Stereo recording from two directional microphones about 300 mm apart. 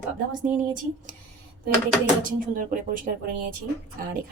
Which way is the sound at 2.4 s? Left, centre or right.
Right.